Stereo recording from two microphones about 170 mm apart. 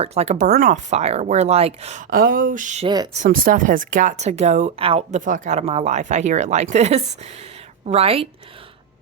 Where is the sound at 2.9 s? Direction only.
25° right (ahead or behind).